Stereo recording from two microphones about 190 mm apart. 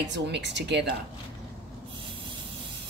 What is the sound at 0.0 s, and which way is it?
Speech, 65° right (ahead or behind).